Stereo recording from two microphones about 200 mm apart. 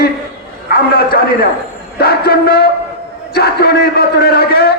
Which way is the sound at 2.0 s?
50° left (ahead or behind).